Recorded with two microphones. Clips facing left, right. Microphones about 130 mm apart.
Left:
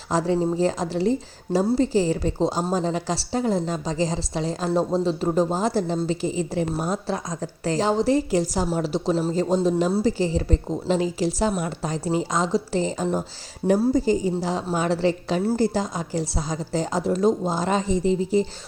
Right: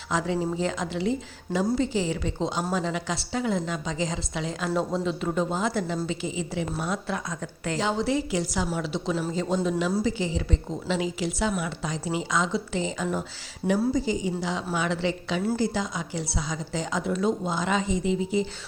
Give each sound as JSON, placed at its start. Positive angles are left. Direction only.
{"t": 0.1, "sound": "a woman's voice", "side_deg": 35}
{"t": 13.9, "sound": "a woman's voice", "side_deg": 45}